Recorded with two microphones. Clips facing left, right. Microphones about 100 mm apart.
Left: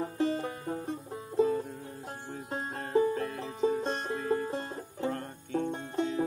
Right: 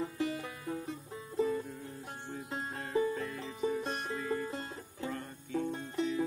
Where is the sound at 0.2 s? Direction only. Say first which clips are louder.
Left 6 dB; 35° left (ahead or behind).